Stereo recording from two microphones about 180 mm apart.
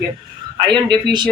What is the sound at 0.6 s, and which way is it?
Speech, 25° right (ahead or behind).